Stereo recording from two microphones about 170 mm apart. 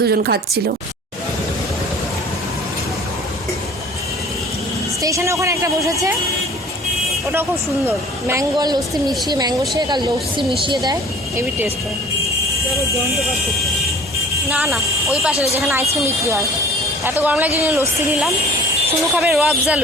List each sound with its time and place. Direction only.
0.0 s speech: 70° right (ahead or behind)
5.0 s a woman's voice: 15° right (ahead or behind)
7.9 s a woman's voice: 15° right (ahead or behind)
11.3 s a woman's voice: 10° right (ahead or behind)
14.5 s speech: 5° right (ahead or behind)
16.0 s a woman's voice: 15° right (ahead or behind)